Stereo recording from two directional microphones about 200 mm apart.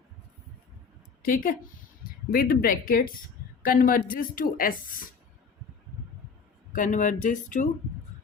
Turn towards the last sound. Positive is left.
turn(degrees=40)  # may be behind; listen again after turning